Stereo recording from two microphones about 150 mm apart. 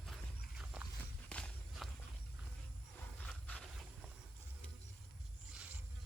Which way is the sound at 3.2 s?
10° left (ahead or behind).